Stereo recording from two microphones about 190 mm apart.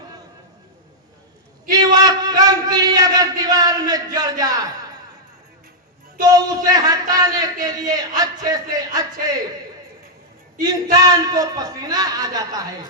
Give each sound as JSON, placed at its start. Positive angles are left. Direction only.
{"t": 1.7, "sound": "a sound", "side_deg": -20}
{"t": 6.1, "sound": "a man's voice", "side_deg": -20}
{"t": 10.9, "sound": "a man's voice", "side_deg": -20}